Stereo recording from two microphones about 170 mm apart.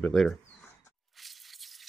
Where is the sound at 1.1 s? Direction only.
Centre (ahead or behind).